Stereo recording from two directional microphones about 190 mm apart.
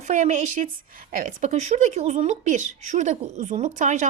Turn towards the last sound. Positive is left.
turn(degrees=-40)  # may be behind; listen again after turning